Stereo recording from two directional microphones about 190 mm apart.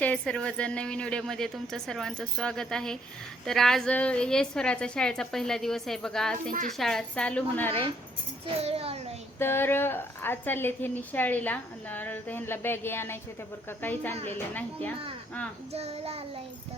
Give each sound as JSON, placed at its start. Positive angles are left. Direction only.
{"t": 0.0, "sound": "a woman's voice", "side_deg": 5}
{"t": 8.5, "sound": "child singing", "side_deg": -30}
{"t": 9.4, "sound": "a woman's voice", "side_deg": 10}
{"t": 15.7, "sound": "child singing", "side_deg": -35}